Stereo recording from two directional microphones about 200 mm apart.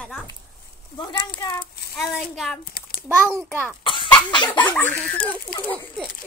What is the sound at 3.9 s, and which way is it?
Speech, 25° left (ahead or behind).